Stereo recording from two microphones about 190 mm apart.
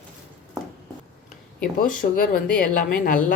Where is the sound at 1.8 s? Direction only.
50° left (ahead or behind).